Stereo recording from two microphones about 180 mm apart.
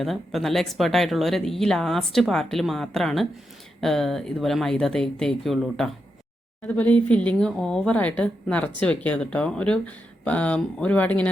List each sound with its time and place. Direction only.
0.0 s a woman's voice: centre (ahead or behind)